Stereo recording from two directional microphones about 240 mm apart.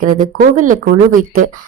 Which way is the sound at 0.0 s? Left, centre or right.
Right.